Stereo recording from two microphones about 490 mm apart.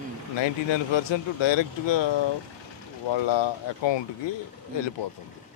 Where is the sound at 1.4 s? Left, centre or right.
Left.